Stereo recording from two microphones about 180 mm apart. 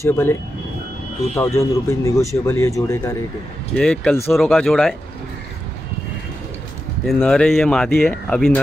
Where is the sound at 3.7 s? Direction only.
5° left (ahead or behind).